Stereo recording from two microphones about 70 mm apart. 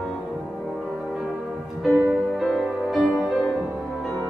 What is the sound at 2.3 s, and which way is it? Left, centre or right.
Music, centre.